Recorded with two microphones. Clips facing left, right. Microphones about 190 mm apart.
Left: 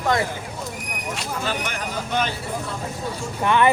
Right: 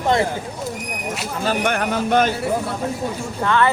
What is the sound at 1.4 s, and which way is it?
Speech, 60° right (ahead or behind).